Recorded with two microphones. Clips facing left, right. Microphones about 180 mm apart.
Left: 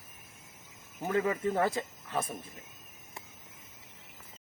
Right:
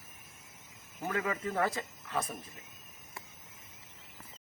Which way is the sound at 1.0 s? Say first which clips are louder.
Left 5 dB; 25° left (ahead or behind).